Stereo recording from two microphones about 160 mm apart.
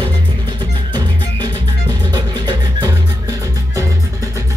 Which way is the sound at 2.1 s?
25° right (ahead or behind).